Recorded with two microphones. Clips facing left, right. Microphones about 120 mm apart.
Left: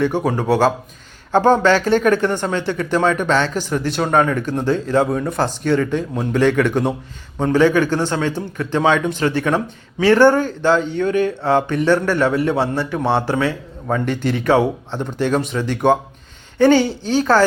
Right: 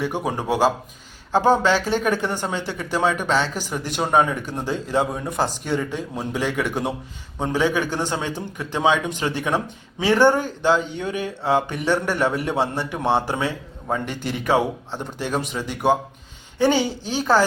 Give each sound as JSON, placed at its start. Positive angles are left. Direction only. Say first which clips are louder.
{"t": 0.3, "sound": "speech", "louder": "left 2 dB", "side_deg": -15}